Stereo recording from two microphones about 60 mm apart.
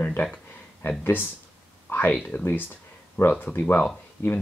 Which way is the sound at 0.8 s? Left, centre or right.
Left.